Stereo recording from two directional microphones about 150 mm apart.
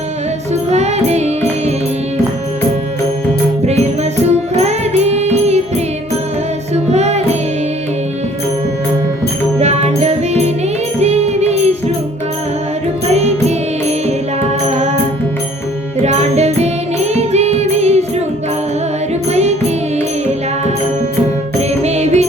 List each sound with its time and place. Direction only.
0.7 s music: 45° right (ahead or behind)
4.2 s music: 45° right (ahead or behind)
6.9 s music: 45° right (ahead or behind)
9.6 s music: 45° right (ahead or behind)
13.1 s music: 45° right (ahead or behind)
16.0 s music: 45° right (ahead or behind)
19.3 s music: 45° right (ahead or behind)